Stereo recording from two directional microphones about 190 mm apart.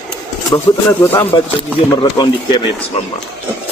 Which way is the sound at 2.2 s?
20° left (ahead or behind).